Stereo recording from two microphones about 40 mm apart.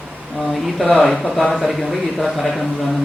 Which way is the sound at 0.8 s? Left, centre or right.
Left.